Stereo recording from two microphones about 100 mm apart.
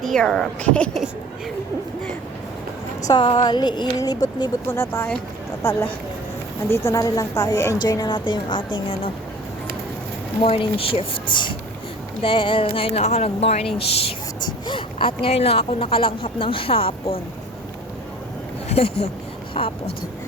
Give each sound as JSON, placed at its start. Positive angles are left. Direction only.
{"t": 0.0, "sound": "a woman's voice", "side_deg": 5}
{"t": 3.1, "sound": "speech", "side_deg": 50}
{"t": 4.7, "sound": "speech", "side_deg": 25}
{"t": 10.4, "sound": "speech", "side_deg": 70}
{"t": 14.4, "sound": "speech", "side_deg": 55}
{"t": 18.7, "sound": "speech", "side_deg": 90}
{"t": 19.6, "sound": "speech", "side_deg": 60}